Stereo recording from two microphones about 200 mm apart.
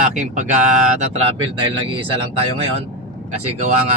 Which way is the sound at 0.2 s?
40° right (ahead or behind).